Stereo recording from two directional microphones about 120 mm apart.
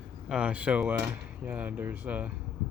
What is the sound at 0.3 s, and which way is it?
Speech, 10° right (ahead or behind).